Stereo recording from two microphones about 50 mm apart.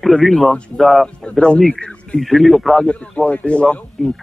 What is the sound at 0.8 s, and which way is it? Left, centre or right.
Speech, centre.